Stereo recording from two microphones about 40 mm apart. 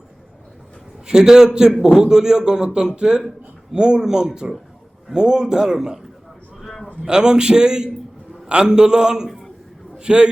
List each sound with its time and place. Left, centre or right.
1.0 s a man's voice: centre
6.6 s a sound: centre
7.0 s a man's voice: centre